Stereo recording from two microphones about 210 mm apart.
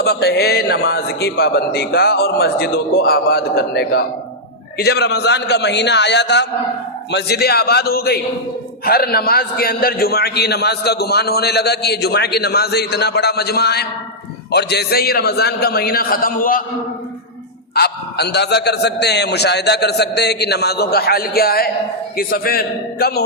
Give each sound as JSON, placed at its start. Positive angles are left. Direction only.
{"t": 0.0, "sound": "a man's voice", "side_deg": 50}
{"t": 17.7, "sound": "a man's voice", "side_deg": 50}